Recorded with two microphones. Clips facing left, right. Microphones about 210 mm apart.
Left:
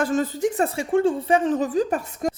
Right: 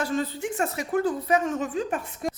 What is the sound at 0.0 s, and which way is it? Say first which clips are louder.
Speech: left 6 dB; 45° left (ahead or behind).